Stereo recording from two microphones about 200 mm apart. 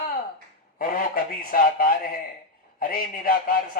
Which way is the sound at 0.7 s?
45° left (ahead or behind).